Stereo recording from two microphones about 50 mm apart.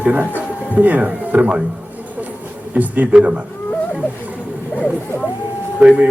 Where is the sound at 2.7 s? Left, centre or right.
Right.